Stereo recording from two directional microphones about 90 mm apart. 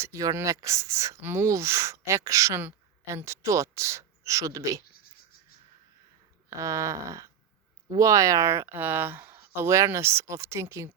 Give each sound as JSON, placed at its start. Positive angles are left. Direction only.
{"t": 0.0, "sound": "a woman's voice", "side_deg": -35}
{"t": 6.6, "sound": "a woman's voice", "side_deg": -35}